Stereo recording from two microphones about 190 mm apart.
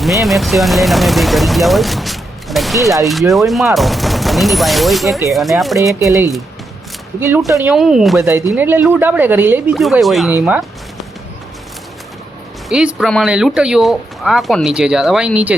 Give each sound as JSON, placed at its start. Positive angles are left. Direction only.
{"t": 0.0, "sound": "speech", "side_deg": 0}
{"t": 7.2, "sound": "speech", "side_deg": -10}
{"t": 8.2, "sound": "speech", "side_deg": -15}
{"t": 9.7, "sound": "speech", "side_deg": 0}
{"t": 12.6, "sound": "speech", "side_deg": -5}